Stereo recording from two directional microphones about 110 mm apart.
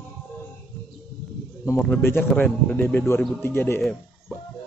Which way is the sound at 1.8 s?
15° left (ahead or behind).